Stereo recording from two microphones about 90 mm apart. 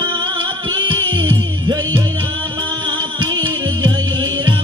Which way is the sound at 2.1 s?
65° right (ahead or behind).